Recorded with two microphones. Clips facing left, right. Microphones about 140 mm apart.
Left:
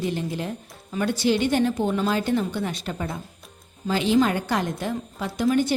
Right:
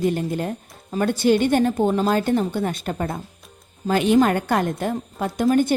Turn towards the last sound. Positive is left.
turn(degrees=-50)  # may be behind; listen again after turning